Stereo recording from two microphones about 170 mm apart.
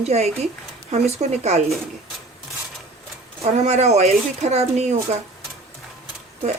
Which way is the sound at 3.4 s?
40° right (ahead or behind).